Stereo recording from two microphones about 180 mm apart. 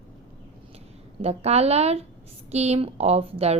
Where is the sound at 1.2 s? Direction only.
35° right (ahead or behind).